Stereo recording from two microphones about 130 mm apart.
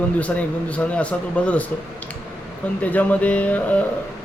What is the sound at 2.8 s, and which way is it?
Speech, 10° left (ahead or behind).